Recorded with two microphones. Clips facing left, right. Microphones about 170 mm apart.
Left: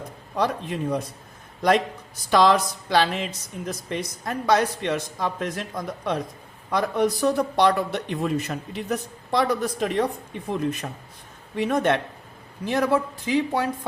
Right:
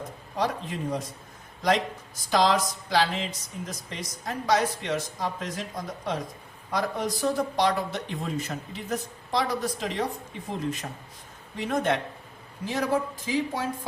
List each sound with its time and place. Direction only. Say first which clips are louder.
0.3 s a man's voice: left 4 dB; 60° left (ahead or behind)
2.3 s a man's voice: left 4 dB; 60° left (ahead or behind)
6.7 s a man's voice: left 6 dB; 60° left (ahead or behind)